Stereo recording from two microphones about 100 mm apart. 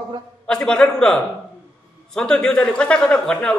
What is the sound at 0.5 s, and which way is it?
A man's voice, 5° left (ahead or behind).